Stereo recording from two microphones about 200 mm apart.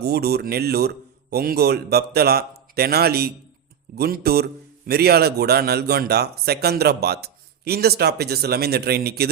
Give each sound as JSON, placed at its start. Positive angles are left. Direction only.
{"t": 0.0, "sound": "a man's voice", "side_deg": -50}